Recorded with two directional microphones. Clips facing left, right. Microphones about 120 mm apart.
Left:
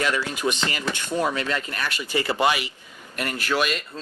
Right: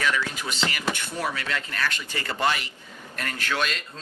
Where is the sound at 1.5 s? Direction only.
15° left (ahead or behind).